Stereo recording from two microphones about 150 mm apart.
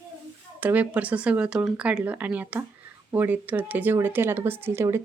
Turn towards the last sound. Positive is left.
turn(degrees=-15)  # may be behind; listen again after turning